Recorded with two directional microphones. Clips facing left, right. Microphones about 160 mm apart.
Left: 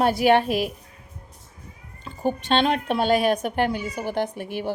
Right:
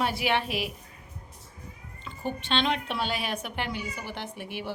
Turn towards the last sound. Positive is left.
turn(degrees=45)  # may be behind; listen again after turning